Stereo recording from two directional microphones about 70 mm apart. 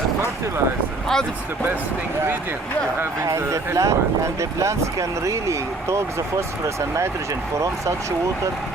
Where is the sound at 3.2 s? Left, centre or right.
Right.